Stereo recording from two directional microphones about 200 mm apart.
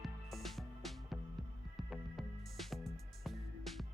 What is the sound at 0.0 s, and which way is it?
Music, centre (ahead or behind).